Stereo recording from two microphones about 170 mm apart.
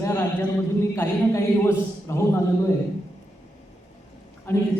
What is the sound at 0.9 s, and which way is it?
A man's voice, 15° left (ahead or behind).